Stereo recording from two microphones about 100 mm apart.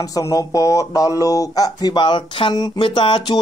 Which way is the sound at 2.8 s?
55° left (ahead or behind).